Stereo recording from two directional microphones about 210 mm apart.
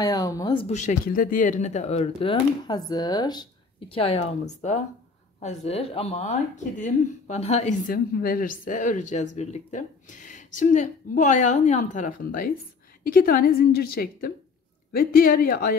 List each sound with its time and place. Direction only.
0.0 s a woman's voice: 15° left (ahead or behind); by 15.7 s 45° left (ahead or behind)